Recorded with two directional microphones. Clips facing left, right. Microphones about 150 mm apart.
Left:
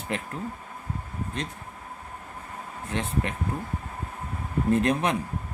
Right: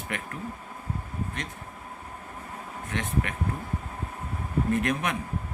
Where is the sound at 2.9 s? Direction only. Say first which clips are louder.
Left 2 dB; 30° left (ahead or behind).